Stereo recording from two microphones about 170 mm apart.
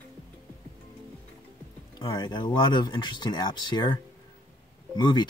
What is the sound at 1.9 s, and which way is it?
Speech, 25° left (ahead or behind).